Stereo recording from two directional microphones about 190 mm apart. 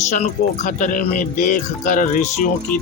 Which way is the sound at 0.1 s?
40° left (ahead or behind).